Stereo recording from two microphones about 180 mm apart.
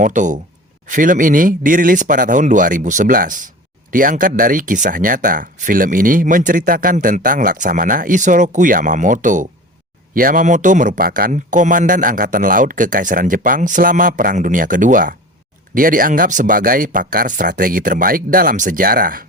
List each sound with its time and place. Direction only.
0.0 s speech: 45° right (ahead or behind)